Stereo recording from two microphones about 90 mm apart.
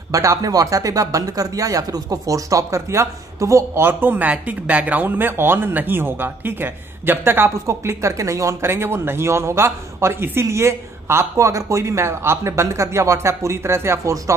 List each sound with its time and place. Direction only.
0.1 s speech: 40° right (ahead or behind)